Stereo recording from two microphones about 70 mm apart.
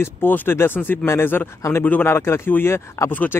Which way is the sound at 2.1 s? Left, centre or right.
Left.